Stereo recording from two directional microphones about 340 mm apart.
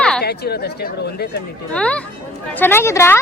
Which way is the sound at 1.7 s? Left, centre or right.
Centre.